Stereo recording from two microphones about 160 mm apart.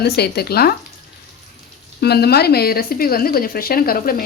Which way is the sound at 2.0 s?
85° left.